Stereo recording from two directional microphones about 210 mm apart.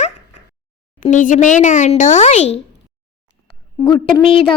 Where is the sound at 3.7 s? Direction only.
20° left (ahead or behind).